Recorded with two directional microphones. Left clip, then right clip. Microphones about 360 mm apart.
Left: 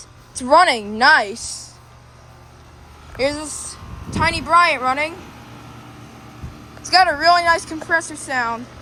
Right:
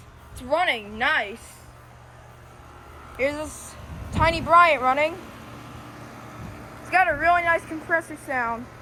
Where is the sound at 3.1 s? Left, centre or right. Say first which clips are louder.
Left 4 dB; centre.